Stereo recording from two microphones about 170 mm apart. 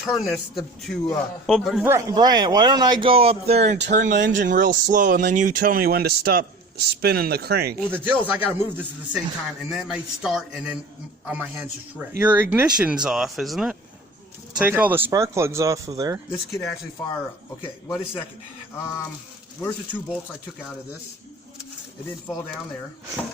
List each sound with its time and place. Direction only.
0.0 s speech: centre (ahead or behind)
1.8 s a man's voice: 15° right (ahead or behind); by 3.8 s 40° right (ahead or behind)
3.8 s speech: 85° right
4.4 s speech: 50° right (ahead or behind); by 7.8 s 70° right (ahead or behind)
7.9 s speech: 10° right (ahead or behind)
16.3 s speech: 15° left (ahead or behind)
17.8 s speech: 15° left (ahead or behind)
19.5 s speech: 15° left (ahead or behind)